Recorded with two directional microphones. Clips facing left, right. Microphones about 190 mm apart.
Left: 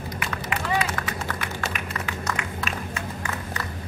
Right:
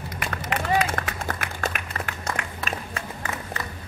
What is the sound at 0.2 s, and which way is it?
Run, 50° right (ahead or behind).